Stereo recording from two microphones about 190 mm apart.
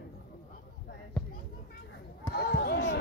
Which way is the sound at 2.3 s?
60° left (ahead or behind).